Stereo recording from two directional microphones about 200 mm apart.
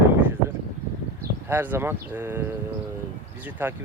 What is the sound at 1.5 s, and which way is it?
Speech, 10° right (ahead or behind).